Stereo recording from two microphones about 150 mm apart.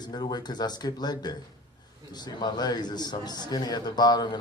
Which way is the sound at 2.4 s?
25° left (ahead or behind).